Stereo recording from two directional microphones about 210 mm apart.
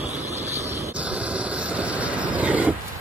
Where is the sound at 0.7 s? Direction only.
10° right (ahead or behind).